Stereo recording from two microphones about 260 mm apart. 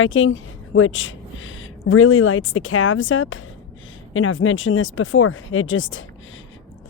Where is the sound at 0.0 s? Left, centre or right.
Left.